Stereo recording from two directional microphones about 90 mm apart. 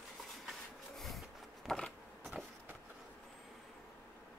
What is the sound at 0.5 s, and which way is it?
Rub, centre (ahead or behind).